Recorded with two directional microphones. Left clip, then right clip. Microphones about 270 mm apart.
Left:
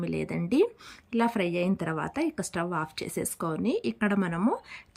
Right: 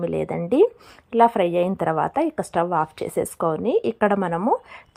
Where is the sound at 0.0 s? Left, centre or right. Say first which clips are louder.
Right 8 dB; centre.